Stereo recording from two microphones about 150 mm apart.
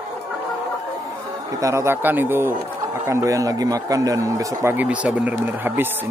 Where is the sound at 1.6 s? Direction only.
20° right (ahead or behind).